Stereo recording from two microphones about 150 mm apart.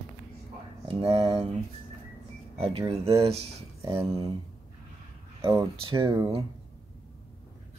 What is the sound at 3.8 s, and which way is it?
Speech, 20° right (ahead or behind).